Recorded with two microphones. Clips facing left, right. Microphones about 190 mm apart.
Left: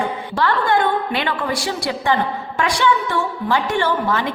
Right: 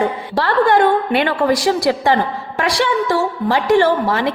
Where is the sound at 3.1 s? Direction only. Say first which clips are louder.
Right 4 dB; 35° right (ahead or behind).